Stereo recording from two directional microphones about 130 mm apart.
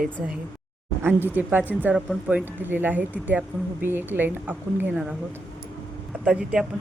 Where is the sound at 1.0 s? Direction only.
15° right (ahead or behind).